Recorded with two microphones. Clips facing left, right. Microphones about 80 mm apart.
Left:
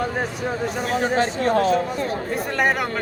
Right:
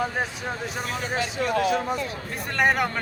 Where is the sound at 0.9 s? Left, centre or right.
Left.